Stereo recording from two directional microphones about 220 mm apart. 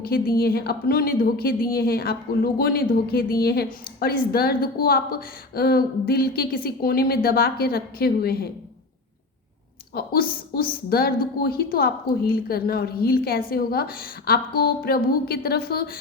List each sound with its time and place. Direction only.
0.0 s a woman's voice: 45° left (ahead or behind)
9.9 s a woman's voice: 45° left (ahead or behind)